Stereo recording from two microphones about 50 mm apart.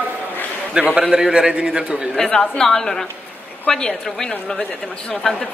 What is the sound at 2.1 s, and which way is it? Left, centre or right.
A woman's voice, centre.